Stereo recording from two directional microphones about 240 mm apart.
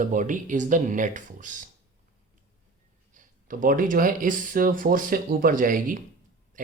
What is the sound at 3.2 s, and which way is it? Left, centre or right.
Speech, right.